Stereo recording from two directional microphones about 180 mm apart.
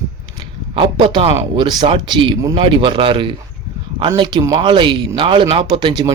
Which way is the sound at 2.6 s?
30° right (ahead or behind).